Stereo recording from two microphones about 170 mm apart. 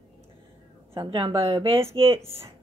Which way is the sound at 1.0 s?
25° right (ahead or behind).